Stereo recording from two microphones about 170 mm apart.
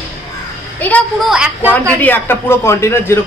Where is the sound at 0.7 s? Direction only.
10° left (ahead or behind).